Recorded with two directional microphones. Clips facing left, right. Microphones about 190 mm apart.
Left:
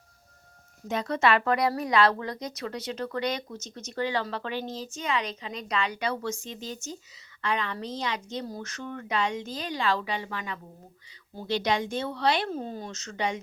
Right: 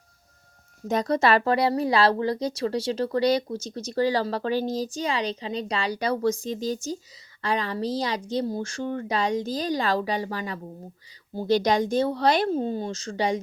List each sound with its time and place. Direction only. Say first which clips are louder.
0.9 s speech: right 4 dB; 40° right (ahead or behind)